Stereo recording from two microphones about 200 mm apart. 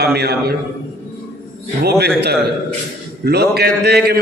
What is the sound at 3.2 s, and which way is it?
Speech, 50° right (ahead or behind).